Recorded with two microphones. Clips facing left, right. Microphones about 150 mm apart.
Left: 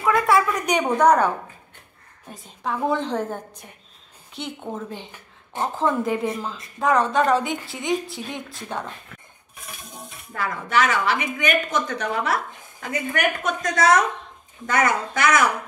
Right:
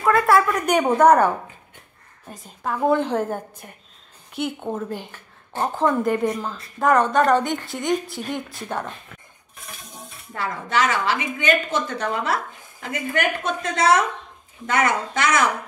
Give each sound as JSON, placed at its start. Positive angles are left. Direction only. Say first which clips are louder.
{"t": 0.0, "sound": "a woman's voice", "louder": "right 2 dB", "side_deg": 0}
{"t": 10.3, "sound": "a woman's voice", "louder": "left 1 dB", "side_deg": -30}